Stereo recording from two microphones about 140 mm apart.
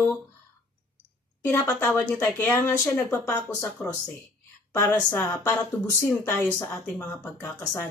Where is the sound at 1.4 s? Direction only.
15° left (ahead or behind).